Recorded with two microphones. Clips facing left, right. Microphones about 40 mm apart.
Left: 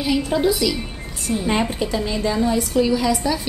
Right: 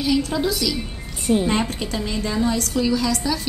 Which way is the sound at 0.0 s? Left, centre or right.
Centre.